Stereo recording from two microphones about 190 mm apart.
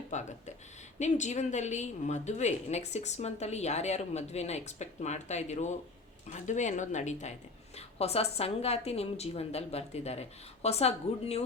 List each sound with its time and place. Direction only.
0.1 s a woman's voice: 40° left (ahead or behind)